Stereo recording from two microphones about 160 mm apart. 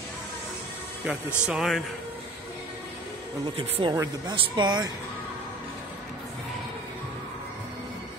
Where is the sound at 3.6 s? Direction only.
30° right (ahead or behind).